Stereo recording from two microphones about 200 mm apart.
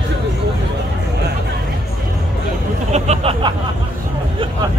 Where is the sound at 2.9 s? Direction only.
35° right (ahead or behind).